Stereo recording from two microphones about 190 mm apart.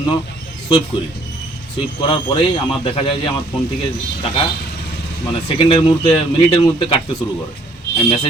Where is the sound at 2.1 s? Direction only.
25° left (ahead or behind).